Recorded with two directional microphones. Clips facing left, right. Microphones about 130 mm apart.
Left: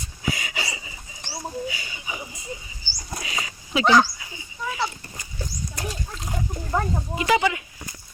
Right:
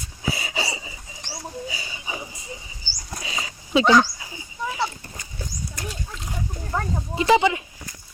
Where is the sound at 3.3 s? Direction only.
30° right (ahead or behind).